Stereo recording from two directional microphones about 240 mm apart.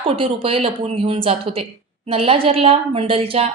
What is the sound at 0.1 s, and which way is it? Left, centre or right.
A woman's voice, right.